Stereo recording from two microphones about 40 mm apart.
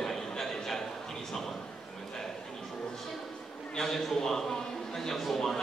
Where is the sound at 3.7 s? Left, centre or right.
Centre.